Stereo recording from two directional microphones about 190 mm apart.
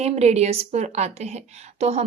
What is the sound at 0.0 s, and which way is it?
A woman's voice, 35° right (ahead or behind).